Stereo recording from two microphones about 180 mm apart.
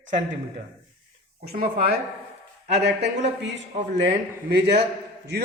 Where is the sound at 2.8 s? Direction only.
70° right (ahead or behind).